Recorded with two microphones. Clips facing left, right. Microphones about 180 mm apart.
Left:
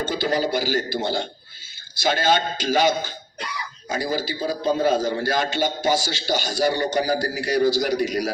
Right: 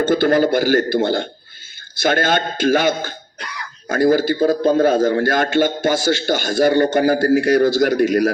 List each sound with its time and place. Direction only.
0.0 s a man's voice: 55° right (ahead or behind)